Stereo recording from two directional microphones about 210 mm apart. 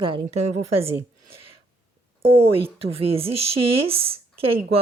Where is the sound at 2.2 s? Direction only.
25° right (ahead or behind).